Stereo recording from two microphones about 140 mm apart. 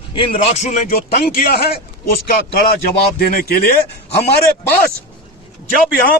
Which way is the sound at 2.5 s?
90° left.